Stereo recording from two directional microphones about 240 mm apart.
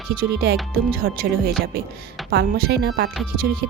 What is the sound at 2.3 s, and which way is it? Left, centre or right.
Speech, right.